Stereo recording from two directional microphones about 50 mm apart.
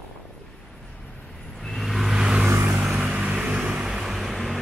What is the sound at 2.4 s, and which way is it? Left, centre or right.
Vehicle, right.